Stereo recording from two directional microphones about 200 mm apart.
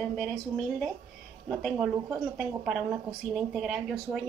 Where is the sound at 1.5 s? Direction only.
Centre (ahead or behind).